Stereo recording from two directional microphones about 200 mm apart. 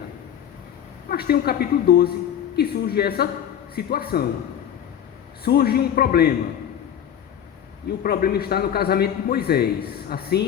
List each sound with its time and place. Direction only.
1.1 s a man's voice: 50° left (ahead or behind)
5.5 s a man's voice: 50° left (ahead or behind)
8.0 s a man's voice: 50° left (ahead or behind)